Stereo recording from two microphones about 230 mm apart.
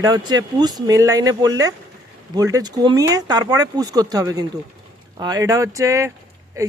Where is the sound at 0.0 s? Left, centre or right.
Centre.